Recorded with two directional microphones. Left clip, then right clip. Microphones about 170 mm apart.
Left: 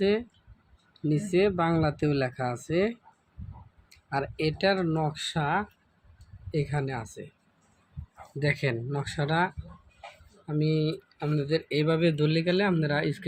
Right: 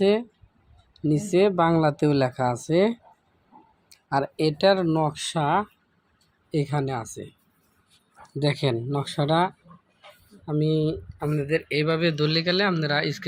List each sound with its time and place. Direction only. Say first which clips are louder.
0.0 s speech: right 5 dB; 25° right (ahead or behind)
8.4 s speech: right 4 dB; 20° right (ahead or behind)
11.2 s speech: right 3 dB; centre (ahead or behind)